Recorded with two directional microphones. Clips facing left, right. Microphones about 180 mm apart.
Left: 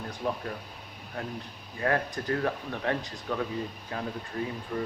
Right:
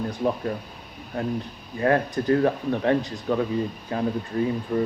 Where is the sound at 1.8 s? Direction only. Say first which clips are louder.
Right 7 dB; 30° right (ahead or behind).